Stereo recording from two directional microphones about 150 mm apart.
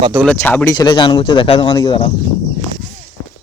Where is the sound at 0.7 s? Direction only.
30° left (ahead or behind).